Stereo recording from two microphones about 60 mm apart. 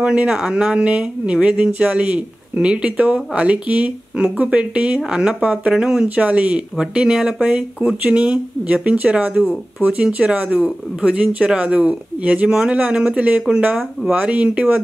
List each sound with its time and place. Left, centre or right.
0.0 s speech: centre
6.0 s speech: right
8.0 s speech: right